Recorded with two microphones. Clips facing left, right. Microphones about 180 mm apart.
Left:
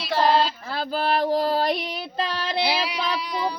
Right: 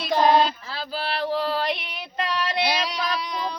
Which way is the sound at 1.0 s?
40° left (ahead or behind).